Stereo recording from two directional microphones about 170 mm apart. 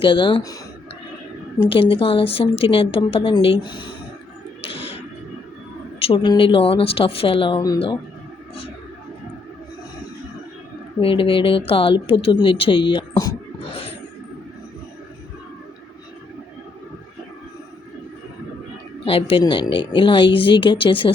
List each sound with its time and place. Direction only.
0.0 s speech: 30° left (ahead or behind)
1.7 s a woman's voice: 30° left (ahead or behind)
6.0 s a woman's voice: 30° left (ahead or behind)
11.0 s speech: 30° left (ahead or behind)
19.0 s speech: 35° left (ahead or behind)